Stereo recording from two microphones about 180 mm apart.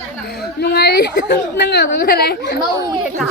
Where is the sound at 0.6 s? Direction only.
65° left (ahead or behind).